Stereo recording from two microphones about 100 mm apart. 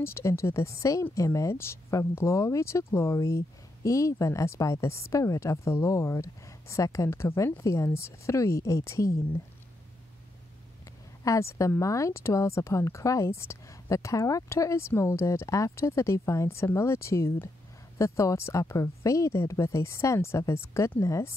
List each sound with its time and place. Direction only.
0.0 s speech: 25° left (ahead or behind)
11.2 s speech: 30° left (ahead or behind)